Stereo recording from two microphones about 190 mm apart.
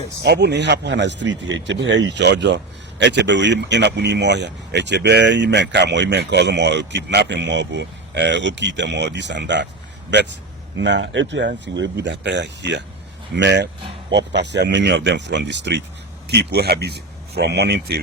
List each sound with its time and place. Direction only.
0.2 s speech: 60° right (ahead or behind)
10.8 s speech: 70° right (ahead or behind)